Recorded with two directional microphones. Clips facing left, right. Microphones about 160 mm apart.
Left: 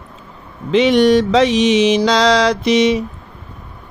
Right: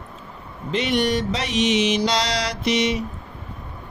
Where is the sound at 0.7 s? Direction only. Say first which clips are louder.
Left 10 dB; 90° left.